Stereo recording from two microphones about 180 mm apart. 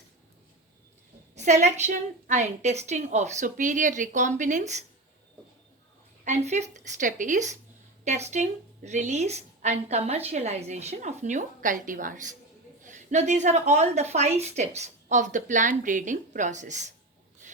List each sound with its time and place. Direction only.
1.4 s a woman's voice: 40° right (ahead or behind)
6.2 s a woman's voice: 40° right (ahead or behind)